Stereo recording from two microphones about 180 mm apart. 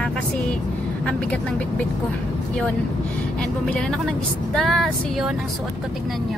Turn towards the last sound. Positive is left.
turn(degrees=0)  # may be behind; listen again after turning